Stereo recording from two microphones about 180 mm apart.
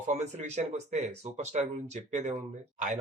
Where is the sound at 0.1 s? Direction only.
40° right (ahead or behind).